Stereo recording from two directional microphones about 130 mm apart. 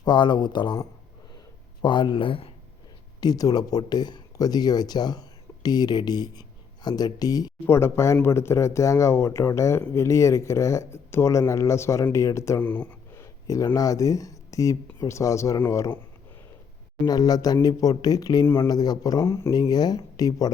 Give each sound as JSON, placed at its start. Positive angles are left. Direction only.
{"t": 0.0, "sound": "speech", "side_deg": 35}
{"t": 1.8, "sound": "speech", "side_deg": 35}
{"t": 3.2, "sound": "speech", "side_deg": 30}
{"t": 17.1, "sound": "speech", "side_deg": 30}
{"t": 19.2, "sound": "speech", "side_deg": 20}
{"t": 19.5, "sound": "speech", "side_deg": 30}